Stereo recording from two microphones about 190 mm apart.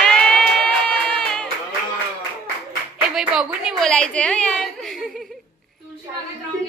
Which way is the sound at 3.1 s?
5° right (ahead or behind).